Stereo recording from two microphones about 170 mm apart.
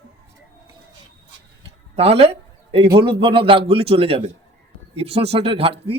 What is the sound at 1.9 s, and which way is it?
A man's voice, 35° right (ahead or behind).